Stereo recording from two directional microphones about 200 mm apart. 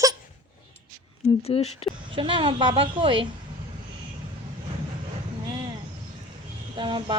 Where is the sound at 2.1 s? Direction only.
25° right (ahead or behind).